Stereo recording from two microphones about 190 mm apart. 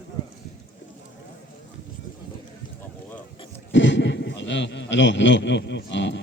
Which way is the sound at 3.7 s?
70° left (ahead or behind).